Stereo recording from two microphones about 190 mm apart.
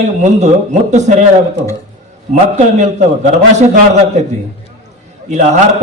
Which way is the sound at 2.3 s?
40° right (ahead or behind).